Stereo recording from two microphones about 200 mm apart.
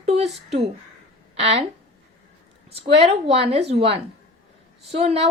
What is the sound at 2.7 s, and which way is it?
Speech, 30° right (ahead or behind).